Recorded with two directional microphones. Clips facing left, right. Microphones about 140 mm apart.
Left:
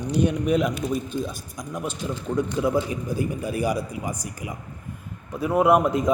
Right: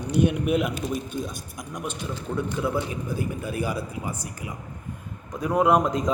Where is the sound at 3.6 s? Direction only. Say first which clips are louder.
Left 4 dB; 15° left (ahead or behind).